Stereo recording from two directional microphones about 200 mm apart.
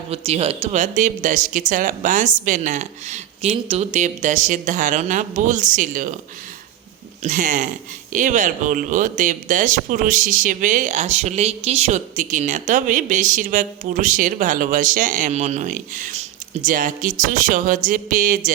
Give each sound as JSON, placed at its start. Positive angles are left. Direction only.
{"t": 0.1, "sound": "speech", "side_deg": -30}
{"t": 7.2, "sound": "speech", "side_deg": -40}